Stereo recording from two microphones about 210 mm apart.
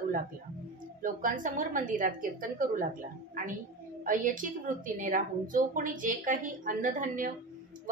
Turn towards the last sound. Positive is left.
turn(degrees=-40)  # may be behind; listen again after turning